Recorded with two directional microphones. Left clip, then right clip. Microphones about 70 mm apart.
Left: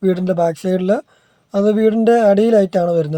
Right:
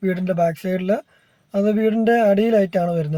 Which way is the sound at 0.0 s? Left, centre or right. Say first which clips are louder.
Left 4 dB; left.